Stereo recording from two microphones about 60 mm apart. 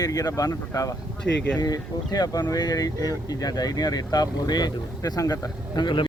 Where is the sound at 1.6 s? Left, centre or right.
Left.